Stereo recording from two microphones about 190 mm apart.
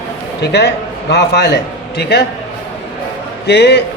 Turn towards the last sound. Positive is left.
turn(degrees=60)  # may be behind; listen again after turning